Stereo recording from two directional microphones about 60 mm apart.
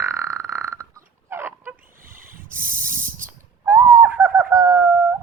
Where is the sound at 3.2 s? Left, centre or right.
Right.